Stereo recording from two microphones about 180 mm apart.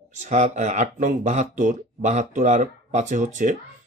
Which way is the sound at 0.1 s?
40° right (ahead or behind).